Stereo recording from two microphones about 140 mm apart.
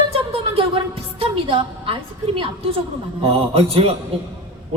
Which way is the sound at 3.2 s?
40° right (ahead or behind).